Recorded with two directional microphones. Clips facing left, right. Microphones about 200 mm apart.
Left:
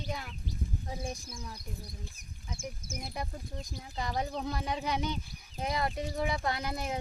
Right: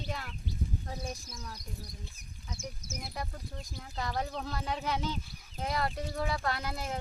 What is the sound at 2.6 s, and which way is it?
Speech, 55° left (ahead or behind).